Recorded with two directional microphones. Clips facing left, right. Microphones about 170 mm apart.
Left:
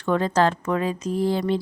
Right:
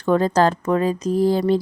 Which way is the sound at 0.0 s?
40° right (ahead or behind).